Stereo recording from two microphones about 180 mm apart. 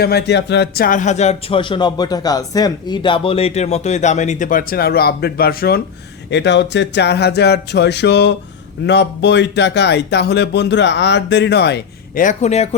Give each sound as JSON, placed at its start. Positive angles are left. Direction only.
{"t": 0.0, "sound": "speech", "side_deg": 65}
{"t": 0.9, "sound": "speech", "side_deg": 45}
{"t": 6.3, "sound": "speech", "side_deg": 75}
{"t": 12.2, "sound": "speech", "side_deg": 40}